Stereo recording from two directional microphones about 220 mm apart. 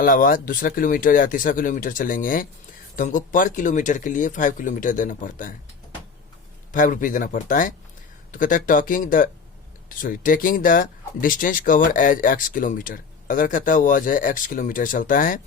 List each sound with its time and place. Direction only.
0.0 s speech: 40° left (ahead or behind)
6.7 s speech: 35° left (ahead or behind)